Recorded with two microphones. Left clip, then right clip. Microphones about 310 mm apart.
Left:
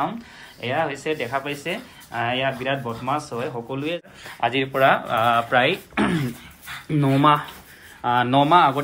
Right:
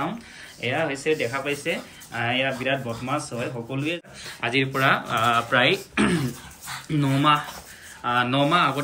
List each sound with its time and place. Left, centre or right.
0.6 s speech: centre